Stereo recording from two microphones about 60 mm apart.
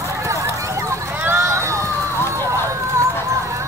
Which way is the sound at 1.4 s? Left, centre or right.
Right.